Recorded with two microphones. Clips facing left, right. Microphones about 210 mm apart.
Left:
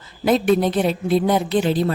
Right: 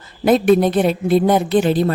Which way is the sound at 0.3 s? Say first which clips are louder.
Right 4 dB; 50° right (ahead or behind).